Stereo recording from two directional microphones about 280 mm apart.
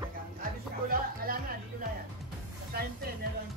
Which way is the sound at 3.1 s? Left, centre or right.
Right.